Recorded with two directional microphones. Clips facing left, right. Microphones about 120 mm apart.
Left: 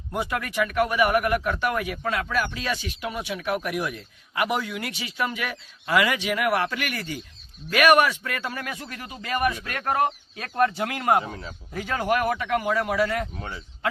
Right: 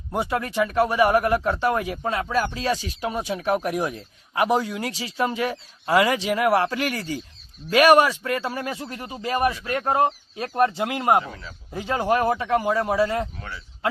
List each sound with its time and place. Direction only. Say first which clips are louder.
0.1 s speech: right 3 dB; 30° right (ahead or behind)
11.2 s speech: even; 25° left (ahead or behind)
11.7 s speech: right 2 dB; 25° right (ahead or behind)